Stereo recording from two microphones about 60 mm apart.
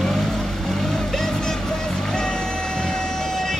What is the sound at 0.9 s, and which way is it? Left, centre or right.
Vehicle, centre.